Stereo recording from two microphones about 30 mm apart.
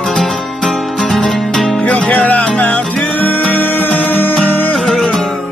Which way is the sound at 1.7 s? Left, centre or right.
Left.